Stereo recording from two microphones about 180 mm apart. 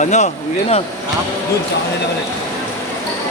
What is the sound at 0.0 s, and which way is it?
Speech, 40° left (ahead or behind).